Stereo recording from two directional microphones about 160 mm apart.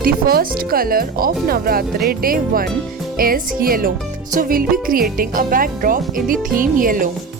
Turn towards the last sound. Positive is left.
turn(degrees=-60)  # may be behind; listen again after turning